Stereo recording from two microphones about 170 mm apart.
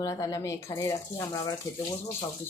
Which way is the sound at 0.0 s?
20° left (ahead or behind).